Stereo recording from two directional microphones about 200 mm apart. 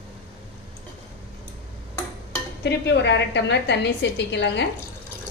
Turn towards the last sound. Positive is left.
turn(degrees=60)  # may be behind; listen again after turning